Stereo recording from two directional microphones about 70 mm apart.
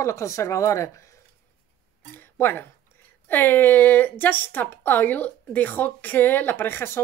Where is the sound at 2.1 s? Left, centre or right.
Left.